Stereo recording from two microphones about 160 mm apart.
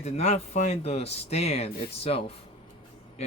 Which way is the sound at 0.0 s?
40° left (ahead or behind).